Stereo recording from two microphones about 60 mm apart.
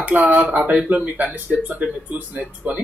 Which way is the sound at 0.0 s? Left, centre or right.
Right.